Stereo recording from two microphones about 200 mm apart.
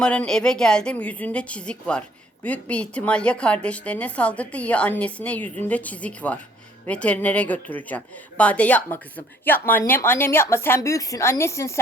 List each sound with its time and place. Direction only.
0.0 s a woman's voice: 5° left (ahead or behind)